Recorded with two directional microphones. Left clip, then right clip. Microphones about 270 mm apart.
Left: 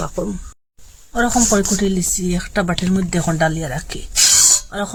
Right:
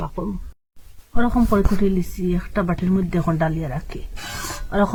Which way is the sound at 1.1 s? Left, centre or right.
Centre.